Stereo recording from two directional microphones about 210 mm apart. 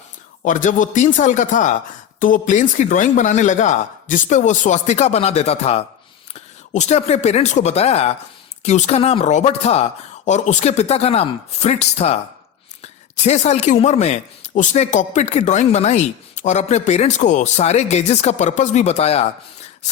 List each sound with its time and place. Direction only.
0.4 s a woman's voice: 40° left (ahead or behind)